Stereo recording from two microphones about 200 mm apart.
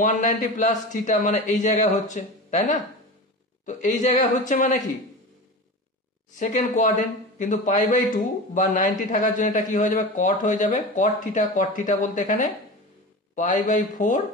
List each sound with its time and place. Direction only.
0.0 s a man's voice: 40° left (ahead or behind)
6.3 s a man's voice: 40° left (ahead or behind)